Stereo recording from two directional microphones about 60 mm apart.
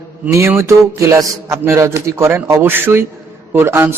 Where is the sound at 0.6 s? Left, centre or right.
Right.